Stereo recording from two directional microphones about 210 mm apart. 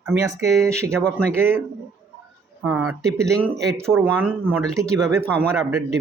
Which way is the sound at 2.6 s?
10° right (ahead or behind).